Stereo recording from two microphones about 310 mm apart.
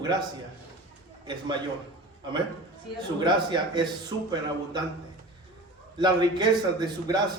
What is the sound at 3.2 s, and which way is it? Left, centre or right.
Speech, centre.